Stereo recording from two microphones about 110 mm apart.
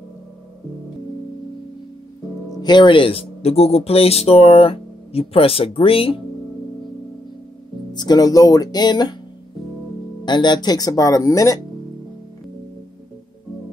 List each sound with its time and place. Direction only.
2.6 s speech: 45° left (ahead or behind)
7.9 s speech: 40° left (ahead or behind)
10.2 s speech: 40° left (ahead or behind)